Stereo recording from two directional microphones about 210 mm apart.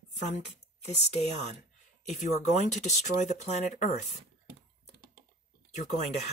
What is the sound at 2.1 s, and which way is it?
Speech, 35° left (ahead or behind).